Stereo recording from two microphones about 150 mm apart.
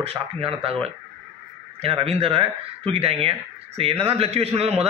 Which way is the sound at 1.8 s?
40° right (ahead or behind).